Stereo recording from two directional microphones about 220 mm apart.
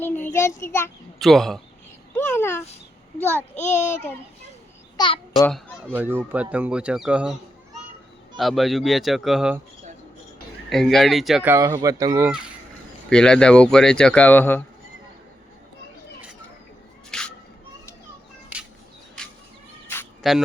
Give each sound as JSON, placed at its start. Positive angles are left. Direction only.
{"t": 0.0, "sound": "child singing", "side_deg": 10}
{"t": 1.2, "sound": "speech", "side_deg": 0}
{"t": 2.1, "sound": "child singing", "side_deg": 10}
{"t": 3.5, "sound": "a child's voice", "side_deg": 30}
{"t": 4.9, "sound": "a child's voice", "side_deg": 20}
{"t": 5.5, "sound": "speech", "side_deg": 0}
{"t": 8.4, "sound": "speech", "side_deg": 0}
{"t": 10.7, "sound": "speech", "side_deg": 0}
{"t": 11.5, "sound": "speech", "side_deg": -15}
{"t": 13.1, "sound": "speech", "side_deg": 5}
{"t": 17.1, "sound": "a sound", "side_deg": 5}
{"t": 20.2, "sound": "speech", "side_deg": 0}